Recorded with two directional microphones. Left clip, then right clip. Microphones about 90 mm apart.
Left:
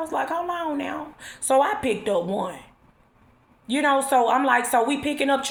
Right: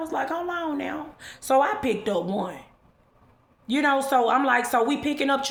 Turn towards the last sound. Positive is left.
turn(degrees=-35)  # may be behind; listen again after turning